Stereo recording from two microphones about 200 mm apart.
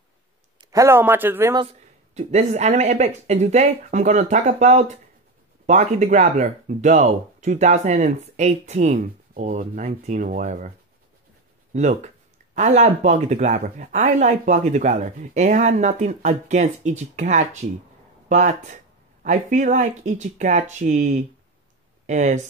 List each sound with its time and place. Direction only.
0.6 s speech: 15° right (ahead or behind)
1.6 s speech: 30° right (ahead or behind)
11.7 s speech: 35° right (ahead or behind)